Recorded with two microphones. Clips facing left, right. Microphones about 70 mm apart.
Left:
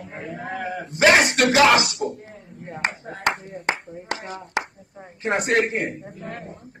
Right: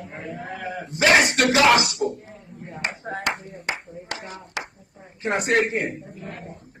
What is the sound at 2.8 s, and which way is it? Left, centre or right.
Speech, left.